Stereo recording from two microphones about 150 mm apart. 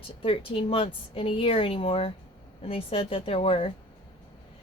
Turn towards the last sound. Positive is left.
turn(degrees=40)  # may be behind; listen again after turning